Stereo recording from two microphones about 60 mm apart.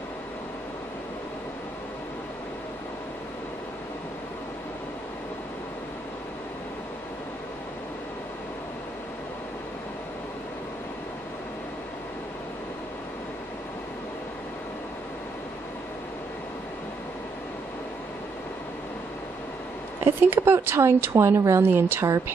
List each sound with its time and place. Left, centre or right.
20.2 s speech: right